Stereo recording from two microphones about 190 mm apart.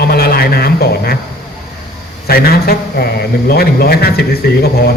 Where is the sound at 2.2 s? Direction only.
55° left (ahead or behind).